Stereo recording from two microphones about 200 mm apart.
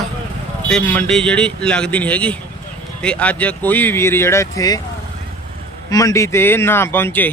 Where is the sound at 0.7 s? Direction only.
5° left (ahead or behind).